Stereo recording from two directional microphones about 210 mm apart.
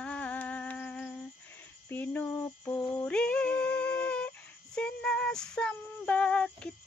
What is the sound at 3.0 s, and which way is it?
Female singing, 5° left (ahead or behind).